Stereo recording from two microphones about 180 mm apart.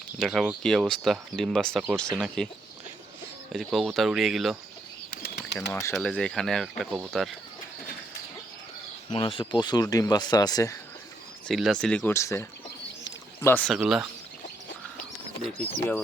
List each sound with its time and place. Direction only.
0.2 s speech: centre (ahead or behind)
3.5 s speech: centre (ahead or behind)
5.2 s bird flight: 60° left (ahead or behind)
5.7 s speech: 5° left (ahead or behind)
9.1 s speech: 30° left (ahead or behind)
11.4 s speech: centre (ahead or behind)
12.1 s speech: 15° left (ahead or behind)
13.1 s a sound: 15° left (ahead or behind)
13.7 s speech: 5° right (ahead or behind)
15.6 s speech: 10° left (ahead or behind)